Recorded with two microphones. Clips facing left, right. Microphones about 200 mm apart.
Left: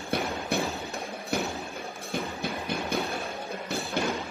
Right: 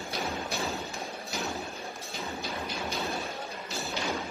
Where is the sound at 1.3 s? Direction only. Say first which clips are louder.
Left 7 dB; 55° left (ahead or behind).